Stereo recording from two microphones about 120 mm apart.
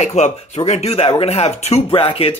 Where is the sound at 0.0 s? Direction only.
70° left (ahead or behind).